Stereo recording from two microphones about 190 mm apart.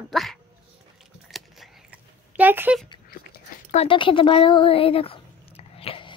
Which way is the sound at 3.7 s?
30° left (ahead or behind).